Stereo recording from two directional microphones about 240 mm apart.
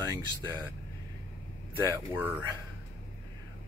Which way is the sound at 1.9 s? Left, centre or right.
Centre.